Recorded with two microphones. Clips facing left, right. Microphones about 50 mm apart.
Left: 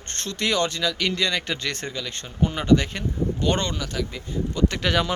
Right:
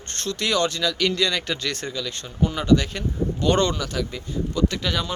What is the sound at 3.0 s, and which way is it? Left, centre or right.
Speech, centre.